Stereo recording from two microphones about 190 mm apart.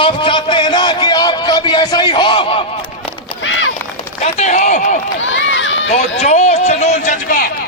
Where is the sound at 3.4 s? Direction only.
90° left.